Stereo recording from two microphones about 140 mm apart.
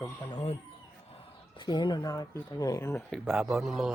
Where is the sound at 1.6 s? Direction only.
30° left (ahead or behind).